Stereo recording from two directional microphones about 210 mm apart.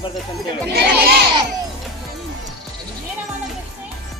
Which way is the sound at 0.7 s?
50° right (ahead or behind).